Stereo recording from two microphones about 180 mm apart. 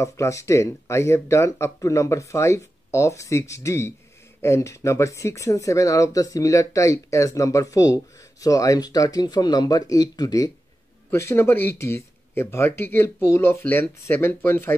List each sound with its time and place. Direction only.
0.0 s speech: 15° left (ahead or behind)